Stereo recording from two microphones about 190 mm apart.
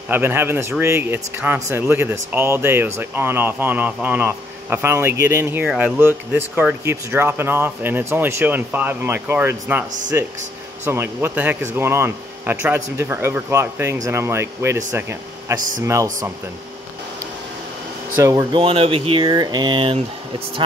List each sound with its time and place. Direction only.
0.1 s speech: 10° right (ahead or behind)
18.1 s speech: 15° right (ahead or behind)